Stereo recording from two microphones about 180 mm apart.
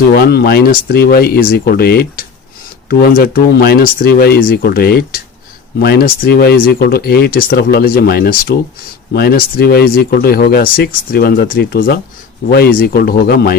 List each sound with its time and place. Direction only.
0.1 s speech: 60° left (ahead or behind)